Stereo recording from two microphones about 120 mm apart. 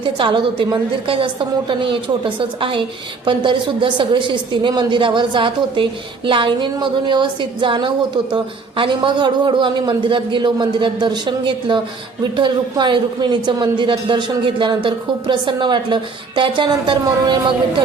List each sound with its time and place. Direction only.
0.0 s a woman's voice: 45° right (ahead or behind)